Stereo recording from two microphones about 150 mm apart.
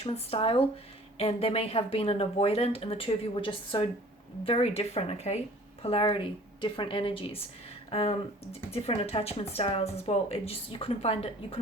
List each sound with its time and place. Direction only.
0.0 s speech: 40° left (ahead or behind)
7.9 s a sound: 40° left (ahead or behind)
8.7 s speech: 40° left (ahead or behind)